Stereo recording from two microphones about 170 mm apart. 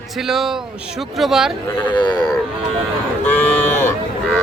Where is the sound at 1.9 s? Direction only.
25° left (ahead or behind).